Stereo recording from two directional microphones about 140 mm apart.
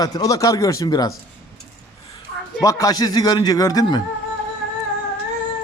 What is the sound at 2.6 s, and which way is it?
Speech, 25° left (ahead or behind).